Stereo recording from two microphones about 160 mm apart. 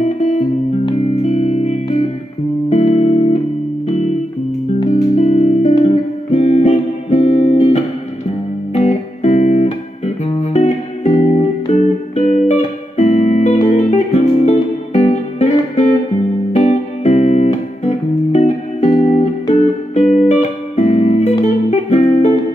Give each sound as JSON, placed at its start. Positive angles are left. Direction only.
{"t": 0.0, "sound": "music", "side_deg": 45}
{"t": 5.1, "sound": "music", "side_deg": 45}
{"t": 12.3, "sound": "music", "side_deg": 45}